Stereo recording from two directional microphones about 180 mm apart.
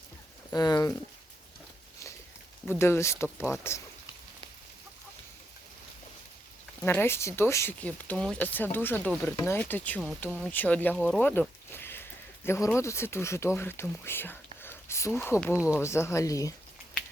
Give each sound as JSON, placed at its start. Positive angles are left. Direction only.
{"t": 0.5, "sound": "speech", "side_deg": 20}
{"t": 2.6, "sound": "speech", "side_deg": 15}
{"t": 6.8, "sound": "speech", "side_deg": 15}
{"t": 15.5, "sound": "speech", "side_deg": -5}
{"t": 15.8, "sound": "speech", "side_deg": 15}